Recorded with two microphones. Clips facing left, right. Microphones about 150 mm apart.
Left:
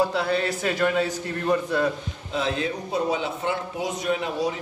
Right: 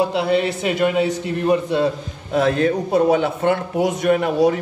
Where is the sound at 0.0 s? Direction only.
25° right (ahead or behind).